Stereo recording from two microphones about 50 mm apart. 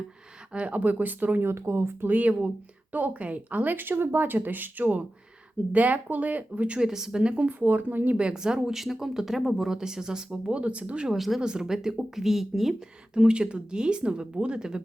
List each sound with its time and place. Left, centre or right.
0.5 s speech: right
1.5 s speech: right
2.0 s speech: right
6.7 s speech: centre
7.2 s speech: right
7.6 s speech: right
8.1 s speech: centre
10.6 s speech: right; by 12.7 s centre
13.1 s speech: centre